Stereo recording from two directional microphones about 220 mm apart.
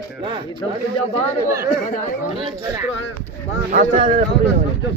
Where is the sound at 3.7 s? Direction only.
40° right (ahead or behind).